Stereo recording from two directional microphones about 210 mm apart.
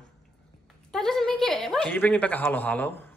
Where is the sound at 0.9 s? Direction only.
Centre (ahead or behind).